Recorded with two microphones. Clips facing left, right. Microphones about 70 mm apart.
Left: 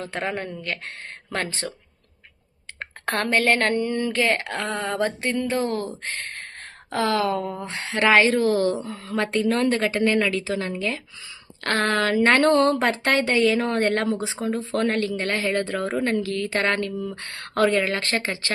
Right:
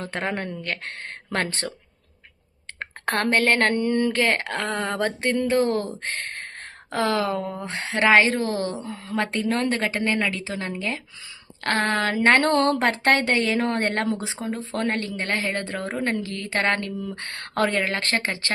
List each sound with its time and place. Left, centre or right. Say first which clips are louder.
0.0 s speech: even; right
3.2 s speech: even; right
6.9 s speech: left 1 dB; right